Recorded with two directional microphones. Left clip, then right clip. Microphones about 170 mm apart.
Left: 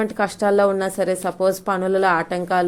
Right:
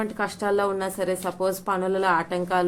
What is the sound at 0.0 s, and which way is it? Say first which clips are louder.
A woman's voice: left 7 dB; 30° left (ahead or behind).